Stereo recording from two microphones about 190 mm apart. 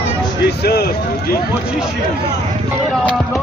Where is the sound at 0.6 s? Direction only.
55° left (ahead or behind).